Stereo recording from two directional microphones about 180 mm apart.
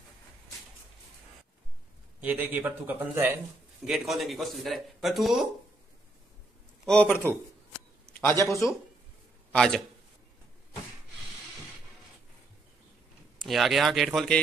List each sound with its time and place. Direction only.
2.1 s a man's voice: 10° right (ahead or behind)
6.9 s speech: 10° left (ahead or behind)
8.5 s speech: 15° left (ahead or behind)
9.5 s a man's voice: 5° left (ahead or behind)
13.4 s a man's voice: centre (ahead or behind)